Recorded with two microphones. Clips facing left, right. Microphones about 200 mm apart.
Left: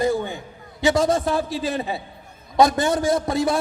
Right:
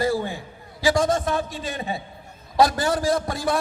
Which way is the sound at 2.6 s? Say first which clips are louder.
Left 2 dB; 20° left (ahead or behind).